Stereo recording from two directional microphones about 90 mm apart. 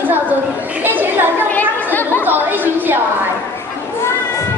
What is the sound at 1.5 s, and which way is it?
Chatter, 20° left (ahead or behind).